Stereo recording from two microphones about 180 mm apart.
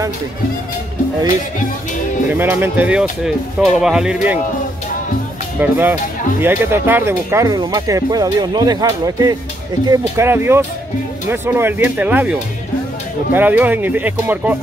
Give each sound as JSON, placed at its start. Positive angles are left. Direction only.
{"t": 2.3, "sound": "speech", "side_deg": -10}
{"t": 5.6, "sound": "speech", "side_deg": -10}